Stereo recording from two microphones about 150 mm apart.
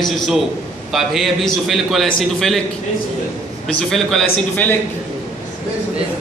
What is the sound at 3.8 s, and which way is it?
Speech, centre (ahead or behind).